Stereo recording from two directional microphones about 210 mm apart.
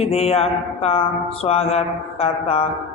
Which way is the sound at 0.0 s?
30° left (ahead or behind).